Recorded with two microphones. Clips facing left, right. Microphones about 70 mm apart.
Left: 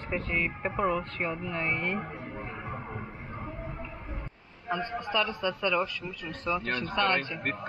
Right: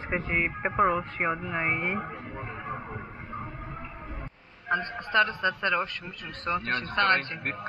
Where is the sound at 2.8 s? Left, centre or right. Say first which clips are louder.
Even; centre.